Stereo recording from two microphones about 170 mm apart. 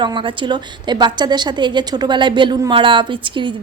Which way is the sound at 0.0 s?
30° right (ahead or behind).